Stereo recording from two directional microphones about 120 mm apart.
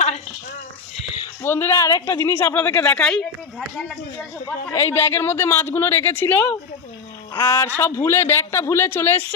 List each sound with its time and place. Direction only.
1.4 s speech: 20° left (ahead or behind)
4.4 s speech: 25° left (ahead or behind)